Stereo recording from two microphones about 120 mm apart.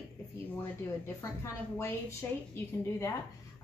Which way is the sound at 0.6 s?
20° left (ahead or behind).